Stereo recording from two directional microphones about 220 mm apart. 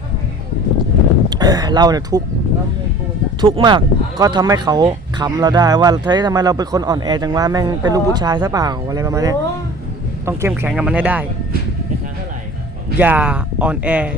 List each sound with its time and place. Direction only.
1.3 s speech: 20° right (ahead or behind)
3.4 s speech: 20° right (ahead or behind)
13.0 s speech: 10° right (ahead or behind)